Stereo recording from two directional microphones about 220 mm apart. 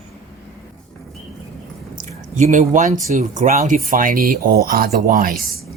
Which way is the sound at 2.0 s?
35° right (ahead or behind).